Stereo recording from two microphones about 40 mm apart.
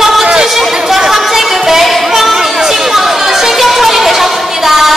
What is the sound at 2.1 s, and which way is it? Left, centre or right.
Chatter, centre.